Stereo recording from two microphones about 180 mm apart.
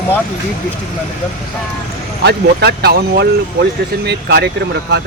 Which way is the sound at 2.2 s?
65° right (ahead or behind).